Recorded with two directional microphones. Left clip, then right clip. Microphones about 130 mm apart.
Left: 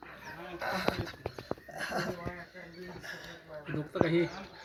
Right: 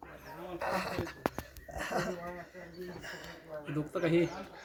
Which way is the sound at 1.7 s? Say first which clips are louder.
Right 2 dB; 50° right (ahead or behind).